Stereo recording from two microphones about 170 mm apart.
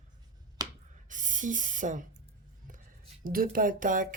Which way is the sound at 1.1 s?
50° right (ahead or behind).